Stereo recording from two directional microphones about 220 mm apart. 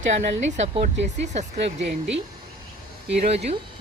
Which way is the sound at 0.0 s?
30° right (ahead or behind).